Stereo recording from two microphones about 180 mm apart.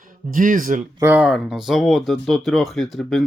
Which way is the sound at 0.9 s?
10° right (ahead or behind).